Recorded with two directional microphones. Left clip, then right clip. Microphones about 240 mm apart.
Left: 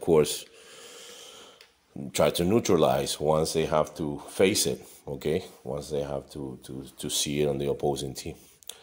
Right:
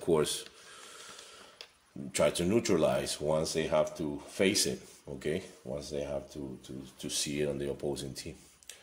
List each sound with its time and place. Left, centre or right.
0.0 s speech: left
2.1 s speech: left